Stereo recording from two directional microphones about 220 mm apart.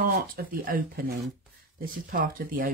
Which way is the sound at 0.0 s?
40° right (ahead or behind).